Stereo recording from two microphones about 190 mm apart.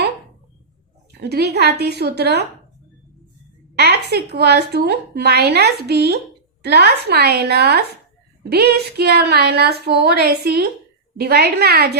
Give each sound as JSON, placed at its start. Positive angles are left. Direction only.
{"t": 1.2, "sound": "a woman's voice", "side_deg": -60}
{"t": 3.8, "sound": "a woman's voice", "side_deg": -60}